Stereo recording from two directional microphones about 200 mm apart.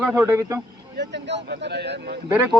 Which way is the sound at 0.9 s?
60° right (ahead or behind).